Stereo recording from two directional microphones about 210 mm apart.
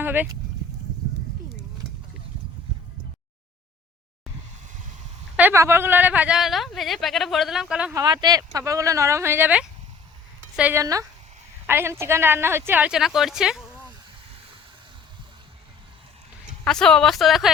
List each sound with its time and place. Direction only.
0.0 s speech: 10° right (ahead or behind)
5.4 s speech: 10° right (ahead or behind)
7.9 s a woman's voice: 20° right (ahead or behind); by 13.8 s 5° right (ahead or behind)
16.6 s speech: 5° left (ahead or behind)